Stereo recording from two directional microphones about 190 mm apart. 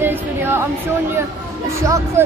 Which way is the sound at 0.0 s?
10° right (ahead or behind).